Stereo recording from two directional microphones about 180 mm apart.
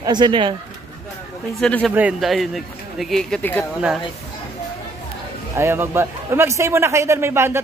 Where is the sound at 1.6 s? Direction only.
5° left (ahead or behind).